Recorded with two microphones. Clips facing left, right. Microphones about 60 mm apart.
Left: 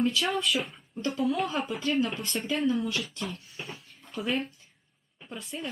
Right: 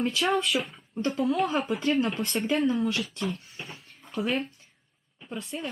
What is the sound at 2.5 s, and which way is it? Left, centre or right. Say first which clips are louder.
Speech: right 2 dB; centre.